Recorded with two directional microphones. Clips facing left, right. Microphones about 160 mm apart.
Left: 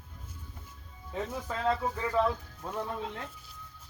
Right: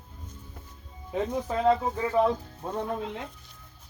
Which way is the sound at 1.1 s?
20° right (ahead or behind).